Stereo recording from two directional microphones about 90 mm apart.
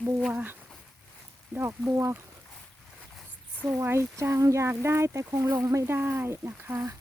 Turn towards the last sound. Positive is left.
turn(degrees=-25)  # may be behind; listen again after turning